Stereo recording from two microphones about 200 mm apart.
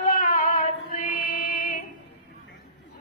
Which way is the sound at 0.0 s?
40° left (ahead or behind).